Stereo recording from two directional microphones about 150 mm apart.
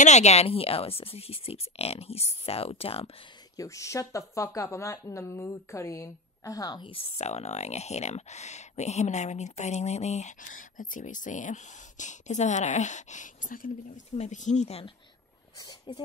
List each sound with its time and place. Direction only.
0.0 s speech: 50° left (ahead or behind)
3.5 s speech: 20° left (ahead or behind)
6.9 s speech: 45° left (ahead or behind); by 14.0 s 65° left (ahead or behind)
14.1 s speech: 50° left (ahead or behind)
15.9 s speech: 30° left (ahead or behind)